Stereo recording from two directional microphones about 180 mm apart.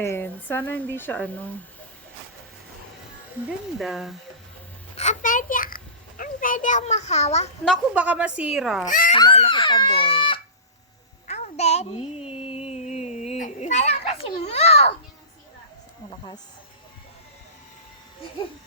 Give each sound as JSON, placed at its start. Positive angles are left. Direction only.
{"t": 0.0, "sound": "speech", "side_deg": 10}
{"t": 3.8, "sound": "a woman's voice", "side_deg": 0}
{"t": 4.9, "sound": "a child's voice", "side_deg": 45}
{"t": 7.9, "sound": "a woman's voice", "side_deg": -5}
{"t": 8.9, "sound": "speech", "side_deg": 50}
{"t": 9.1, "sound": "a child's voice", "side_deg": 30}
{"t": 11.3, "sound": "a sound", "side_deg": 40}
{"t": 16.0, "sound": "a child's voice", "side_deg": 25}